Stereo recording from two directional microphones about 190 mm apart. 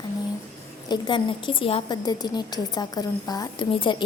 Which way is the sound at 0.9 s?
25° left (ahead or behind).